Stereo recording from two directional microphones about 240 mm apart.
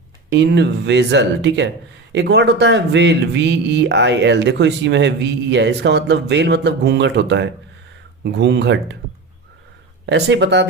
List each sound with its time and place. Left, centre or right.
0.3 s speech: right
10.1 s speech: right